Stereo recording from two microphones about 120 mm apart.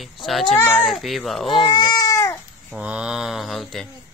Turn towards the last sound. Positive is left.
turn(degrees=0)  # may be behind; listen again after turning